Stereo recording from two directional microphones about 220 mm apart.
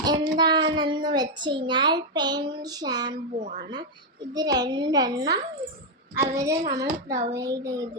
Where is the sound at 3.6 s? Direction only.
20° right (ahead or behind).